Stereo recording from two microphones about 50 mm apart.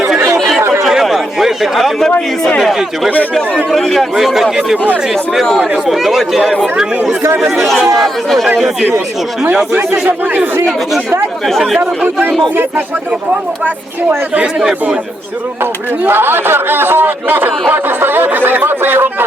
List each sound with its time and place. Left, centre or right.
0.3 s chatter: centre
0.8 s a sound: centre
3.7 s speech: centre
4.1 s speech: centre
5.9 s speech: centre
9.9 s speech: right
11.4 s speech: centre
14.3 s speech: centre
15.6 s speech: right